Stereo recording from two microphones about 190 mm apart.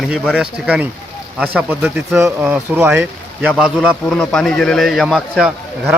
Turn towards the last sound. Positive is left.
turn(degrees=-5)  # may be behind; listen again after turning